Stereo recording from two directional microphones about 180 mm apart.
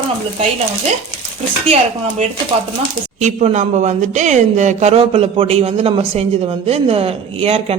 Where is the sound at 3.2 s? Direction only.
40° right (ahead or behind).